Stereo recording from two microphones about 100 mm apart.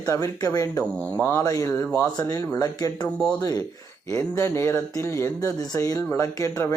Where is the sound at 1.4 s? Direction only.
35° left (ahead or behind).